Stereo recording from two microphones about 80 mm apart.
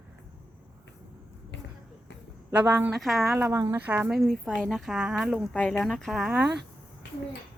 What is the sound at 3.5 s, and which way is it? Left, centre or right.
Speech, right.